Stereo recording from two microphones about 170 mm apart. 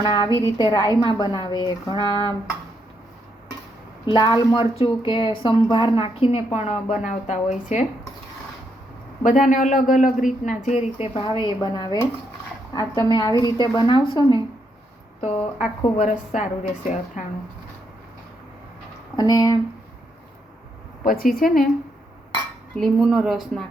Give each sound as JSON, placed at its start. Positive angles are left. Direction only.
{"t": 0.0, "sound": "a woman's voice", "side_deg": 25}
{"t": 4.0, "sound": "a woman's voice", "side_deg": 25}
{"t": 9.2, "sound": "a man's voice", "side_deg": 50}
{"t": 15.2, "sound": "a man's voice", "side_deg": 40}
{"t": 19.1, "sound": "a woman's voice", "side_deg": 25}
{"t": 21.0, "sound": "speech", "side_deg": 55}
{"t": 22.7, "sound": "a woman's voice", "side_deg": 0}